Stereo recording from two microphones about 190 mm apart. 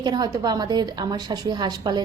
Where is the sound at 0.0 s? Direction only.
20° right (ahead or behind).